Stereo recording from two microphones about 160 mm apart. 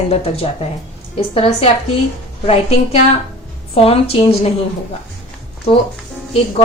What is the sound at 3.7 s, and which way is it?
Speech, 40° left (ahead or behind).